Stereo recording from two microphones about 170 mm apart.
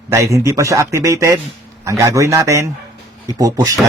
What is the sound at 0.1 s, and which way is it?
A man's voice, 15° right (ahead or behind).